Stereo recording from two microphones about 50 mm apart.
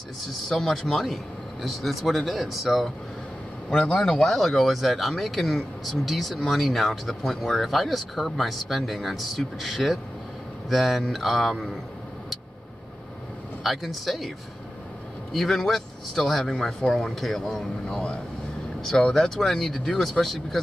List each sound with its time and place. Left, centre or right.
0.2 s speech: centre
3.7 s speech: centre
13.7 s speech: centre
15.3 s speech: centre
17.8 s speech: centre